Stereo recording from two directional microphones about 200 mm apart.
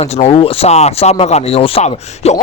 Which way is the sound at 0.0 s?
30° left (ahead or behind).